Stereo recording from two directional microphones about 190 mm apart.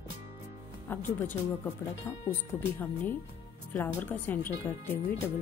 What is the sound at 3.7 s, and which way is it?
Speech, 10° left (ahead or behind).